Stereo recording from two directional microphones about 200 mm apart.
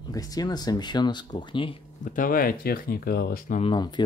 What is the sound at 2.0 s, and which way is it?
Speech, 40° left (ahead or behind).